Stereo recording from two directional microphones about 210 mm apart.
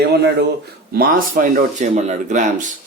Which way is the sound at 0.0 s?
50° right (ahead or behind).